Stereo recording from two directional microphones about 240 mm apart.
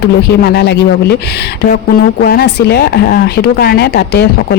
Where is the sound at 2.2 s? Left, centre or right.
Left.